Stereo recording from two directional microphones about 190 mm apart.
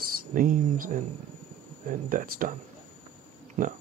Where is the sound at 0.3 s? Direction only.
45° right (ahead or behind).